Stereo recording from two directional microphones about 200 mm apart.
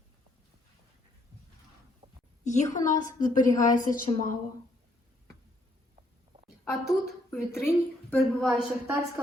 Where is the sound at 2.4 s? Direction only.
35° left (ahead or behind).